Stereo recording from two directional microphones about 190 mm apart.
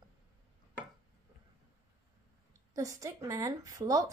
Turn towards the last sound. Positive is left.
turn(degrees=-15)  # may be behind; listen again after turning